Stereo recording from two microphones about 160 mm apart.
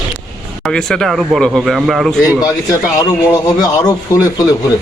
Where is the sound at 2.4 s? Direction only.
20° left (ahead or behind).